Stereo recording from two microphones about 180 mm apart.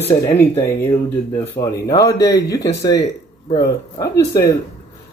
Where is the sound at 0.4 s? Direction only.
10° left (ahead or behind).